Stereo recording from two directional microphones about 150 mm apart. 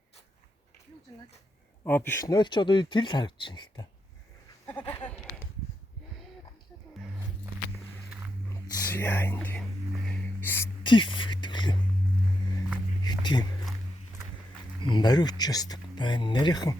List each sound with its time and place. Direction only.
1.8 s speech: 15° left (ahead or behind); by 3.8 s 30° left (ahead or behind)
4.9 s speech: 15° left (ahead or behind)
8.4 s whispering: 15° left (ahead or behind)
10.1 s music: 15° left (ahead or behind)
10.8 s music: 30° left (ahead or behind)
13.0 s a sound: 30° left (ahead or behind)
14.8 s speech: 30° left (ahead or behind)